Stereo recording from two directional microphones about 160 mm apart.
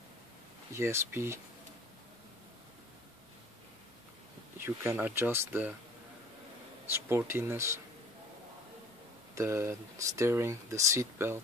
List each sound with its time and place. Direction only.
0.7 s speech: 15° right (ahead or behind)
4.6 s speech: 15° right (ahead or behind)
6.9 s speech: 15° right (ahead or behind)
9.3 s speech: 15° right (ahead or behind)